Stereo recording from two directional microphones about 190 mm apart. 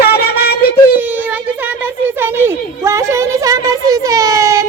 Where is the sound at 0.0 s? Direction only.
55° left (ahead or behind).